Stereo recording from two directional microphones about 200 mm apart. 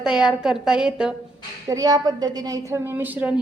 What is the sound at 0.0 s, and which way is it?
A woman's voice, 5° right (ahead or behind).